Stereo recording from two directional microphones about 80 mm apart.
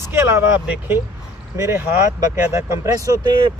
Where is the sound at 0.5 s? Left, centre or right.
Centre.